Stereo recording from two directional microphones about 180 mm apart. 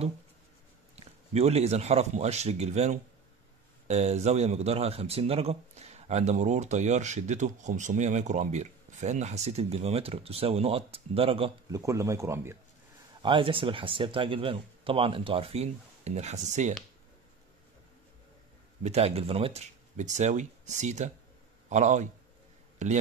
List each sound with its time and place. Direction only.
0.9 s speech: 35° right (ahead or behind)
11.7 s speech: 15° right (ahead or behind)
13.2 s speech: 30° right (ahead or behind)
18.8 s speech: 35° right (ahead or behind)